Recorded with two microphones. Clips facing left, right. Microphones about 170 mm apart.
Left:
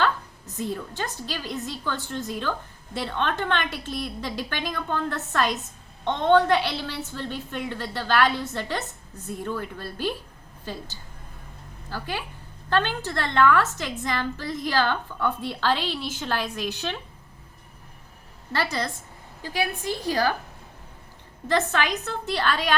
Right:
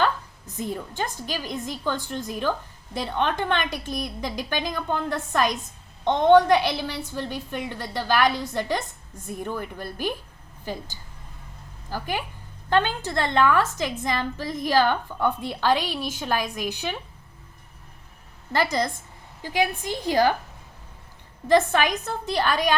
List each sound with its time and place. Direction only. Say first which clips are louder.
0.6 s a woman's voice: right 1 dB; 15° right (ahead or behind)
11.9 s a woman's voice: right 3 dB; 15° right (ahead or behind)
18.5 s a woman's voice: right 4 dB; 15° right (ahead or behind)
21.4 s a woman's voice: right 5 dB; 15° right (ahead or behind)